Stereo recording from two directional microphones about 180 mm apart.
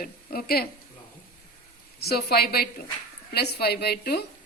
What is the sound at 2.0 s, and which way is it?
A woman's voice, 60° left (ahead or behind).